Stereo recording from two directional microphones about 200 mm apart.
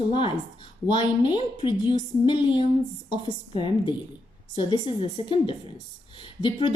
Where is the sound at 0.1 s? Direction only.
25° left (ahead or behind).